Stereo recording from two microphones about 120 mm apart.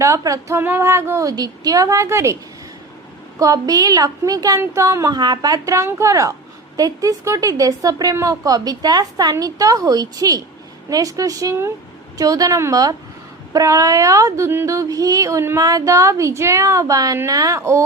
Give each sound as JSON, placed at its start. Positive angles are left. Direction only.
{"t": 0.0, "sound": "a woman's voice", "side_deg": -25}